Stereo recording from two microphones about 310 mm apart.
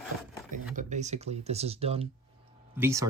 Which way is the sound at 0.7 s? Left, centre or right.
Right.